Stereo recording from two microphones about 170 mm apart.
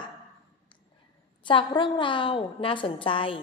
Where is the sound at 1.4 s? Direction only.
30° left (ahead or behind).